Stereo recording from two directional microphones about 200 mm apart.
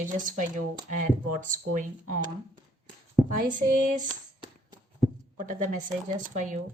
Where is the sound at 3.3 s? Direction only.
40° right (ahead or behind).